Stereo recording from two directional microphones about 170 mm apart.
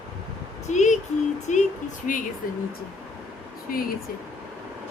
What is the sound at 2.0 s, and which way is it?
Speech, 50° left (ahead or behind).